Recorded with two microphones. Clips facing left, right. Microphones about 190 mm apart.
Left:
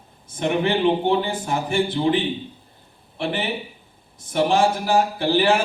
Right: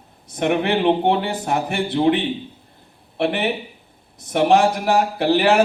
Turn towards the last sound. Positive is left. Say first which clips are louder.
# right 2 dB
turn(degrees=-65)  # may be behind; listen again after turning